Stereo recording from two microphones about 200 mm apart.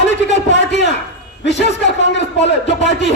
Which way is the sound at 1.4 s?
60° left (ahead or behind).